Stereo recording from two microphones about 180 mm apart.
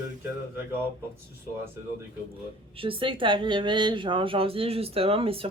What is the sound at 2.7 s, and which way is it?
A woman's voice, 30° right (ahead or behind).